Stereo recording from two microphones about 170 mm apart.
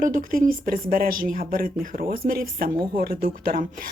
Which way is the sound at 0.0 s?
55° right (ahead or behind).